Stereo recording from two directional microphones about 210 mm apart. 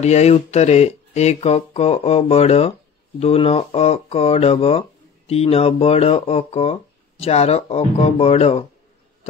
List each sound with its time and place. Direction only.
0.0 s speech: 30° left (ahead or behind)